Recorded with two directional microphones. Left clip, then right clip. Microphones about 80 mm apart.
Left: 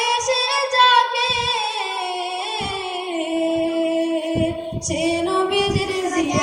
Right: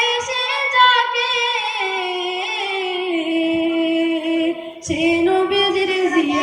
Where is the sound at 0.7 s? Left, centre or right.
Left.